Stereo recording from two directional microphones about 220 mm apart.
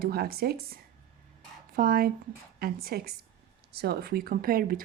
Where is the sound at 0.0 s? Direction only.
45° right (ahead or behind).